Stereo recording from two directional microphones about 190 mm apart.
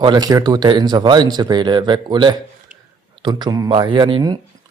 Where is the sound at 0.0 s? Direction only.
20° right (ahead or behind).